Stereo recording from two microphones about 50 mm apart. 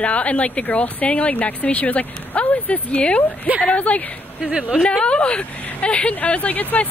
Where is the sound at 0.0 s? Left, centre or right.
Left.